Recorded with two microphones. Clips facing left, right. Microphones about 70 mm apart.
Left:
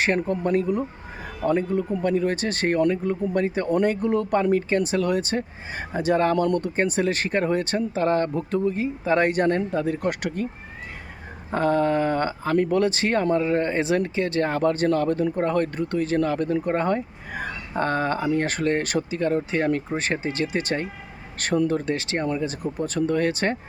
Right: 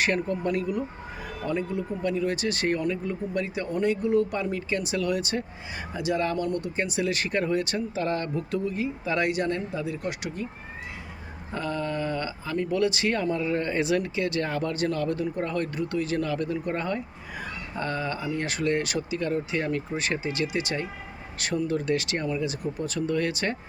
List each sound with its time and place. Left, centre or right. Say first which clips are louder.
0.0 s speech: left 3 dB; left
6.3 s speech: left 6 dB; left
11.5 s speech: left 9 dB; left